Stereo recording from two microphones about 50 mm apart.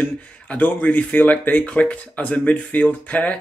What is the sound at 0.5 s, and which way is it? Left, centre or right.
A man's voice, left.